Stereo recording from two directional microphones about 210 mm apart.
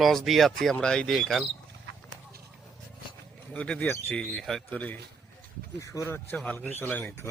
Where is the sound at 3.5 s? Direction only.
5° left (ahead or behind).